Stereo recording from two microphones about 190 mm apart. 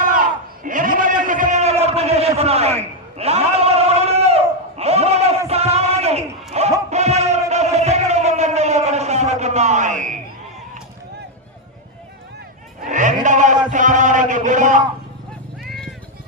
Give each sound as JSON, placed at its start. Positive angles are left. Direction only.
{"t": 0.0, "sound": "a sound", "side_deg": -45}
{"t": 6.9, "sound": "music", "side_deg": -35}
{"t": 7.5, "sound": "a sound", "side_deg": -35}
{"t": 12.9, "sound": "sheep", "side_deg": -40}
{"t": 13.2, "sound": "chant", "side_deg": -40}
{"t": 15.6, "sound": "music", "side_deg": 0}